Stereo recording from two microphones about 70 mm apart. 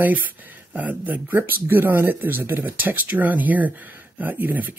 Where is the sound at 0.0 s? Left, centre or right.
Right.